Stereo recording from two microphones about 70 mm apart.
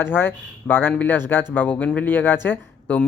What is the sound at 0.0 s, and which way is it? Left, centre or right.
Speech, left.